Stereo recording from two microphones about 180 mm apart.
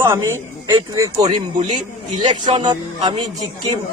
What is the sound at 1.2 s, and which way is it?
Speech, 40° right (ahead or behind).